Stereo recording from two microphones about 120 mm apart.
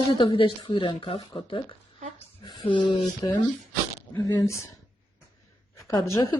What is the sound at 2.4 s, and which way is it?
Speech, 40° left (ahead or behind).